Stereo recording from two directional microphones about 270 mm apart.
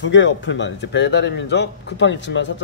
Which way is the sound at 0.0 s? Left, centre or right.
Left.